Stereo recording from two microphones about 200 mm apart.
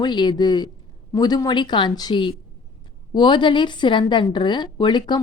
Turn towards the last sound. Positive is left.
turn(degrees=20)  # may be behind; listen again after turning